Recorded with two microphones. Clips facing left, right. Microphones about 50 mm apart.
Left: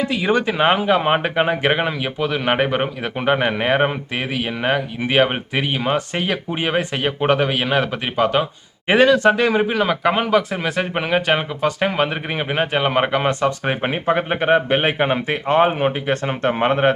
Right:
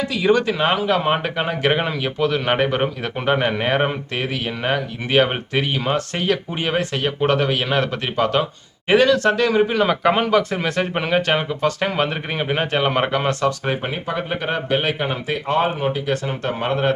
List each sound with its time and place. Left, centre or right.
0.0 s speech: left
9.8 s speech: centre
13.8 s speech: left